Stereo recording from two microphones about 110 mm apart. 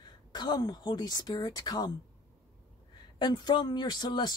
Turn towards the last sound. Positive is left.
turn(degrees=40)  # may be behind; listen again after turning